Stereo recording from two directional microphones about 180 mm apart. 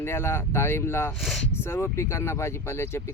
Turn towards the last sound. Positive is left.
turn(degrees=15)  # may be behind; listen again after turning